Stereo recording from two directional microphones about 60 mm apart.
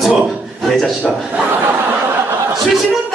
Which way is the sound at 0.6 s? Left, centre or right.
Centre.